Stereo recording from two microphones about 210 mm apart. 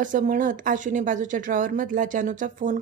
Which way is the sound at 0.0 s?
40° right (ahead or behind).